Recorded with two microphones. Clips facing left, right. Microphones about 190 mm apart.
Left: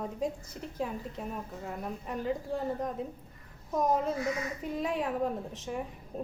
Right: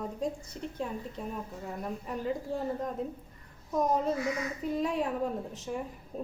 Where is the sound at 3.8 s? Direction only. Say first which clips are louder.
Right 1 dB; centre (ahead or behind).